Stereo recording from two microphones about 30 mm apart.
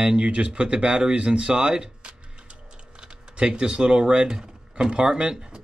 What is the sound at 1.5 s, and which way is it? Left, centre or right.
Tick-tock, right.